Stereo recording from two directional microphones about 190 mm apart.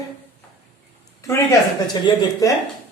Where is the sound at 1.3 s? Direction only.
20° left (ahead or behind).